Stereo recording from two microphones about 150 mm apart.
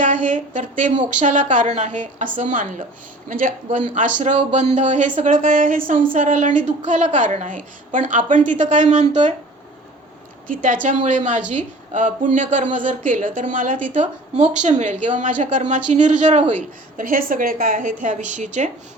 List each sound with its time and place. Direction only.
0.0 s a woman's voice: 60° right (ahead or behind)
10.4 s a woman's voice: 65° right (ahead or behind)